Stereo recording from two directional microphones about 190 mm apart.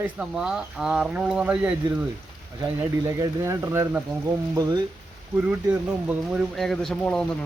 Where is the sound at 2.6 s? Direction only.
15° right (ahead or behind).